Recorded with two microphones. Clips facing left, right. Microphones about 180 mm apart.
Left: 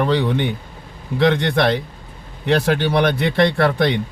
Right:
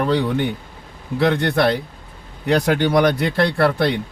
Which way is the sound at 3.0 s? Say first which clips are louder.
Left 1 dB; 10° right (ahead or behind).